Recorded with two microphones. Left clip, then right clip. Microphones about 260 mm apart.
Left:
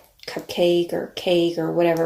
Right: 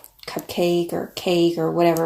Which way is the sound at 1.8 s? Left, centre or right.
Right.